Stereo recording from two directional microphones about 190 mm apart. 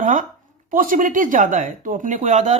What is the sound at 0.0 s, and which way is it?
Speech, 45° right (ahead or behind).